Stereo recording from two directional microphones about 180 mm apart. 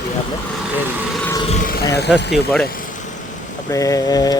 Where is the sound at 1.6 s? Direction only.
55° left (ahead or behind).